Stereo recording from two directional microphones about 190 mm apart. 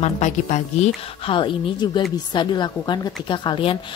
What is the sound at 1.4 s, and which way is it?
A woman's voice, 25° left (ahead or behind).